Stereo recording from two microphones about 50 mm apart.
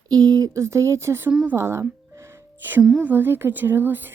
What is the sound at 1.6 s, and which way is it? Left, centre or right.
Music, right.